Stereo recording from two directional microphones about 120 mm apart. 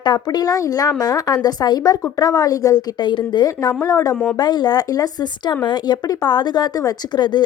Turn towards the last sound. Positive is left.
turn(degrees=35)  # may be behind; listen again after turning